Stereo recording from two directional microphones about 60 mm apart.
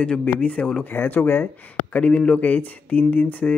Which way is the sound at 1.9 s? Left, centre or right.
Left.